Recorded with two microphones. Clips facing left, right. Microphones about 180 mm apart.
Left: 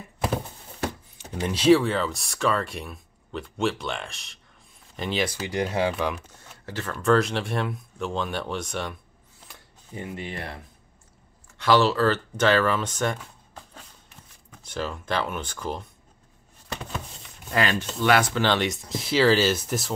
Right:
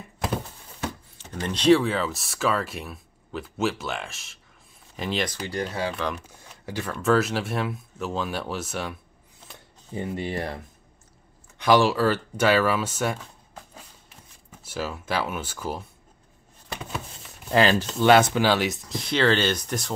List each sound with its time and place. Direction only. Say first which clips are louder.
1.1 s speech: left 2 dB; 10° left (ahead or behind)
6.1 s speech: right 1 dB; 10° right (ahead or behind)
9.5 s shuffling cards: right 4 dB; 30° right (ahead or behind)
11.5 s speech: right 1 dB; 15° right (ahead or behind)
14.6 s speech: even; 5° right (ahead or behind)
17.5 s speech: right 5 dB; 30° right (ahead or behind)
18.4 s speech: right 1 dB; 5° right (ahead or behind)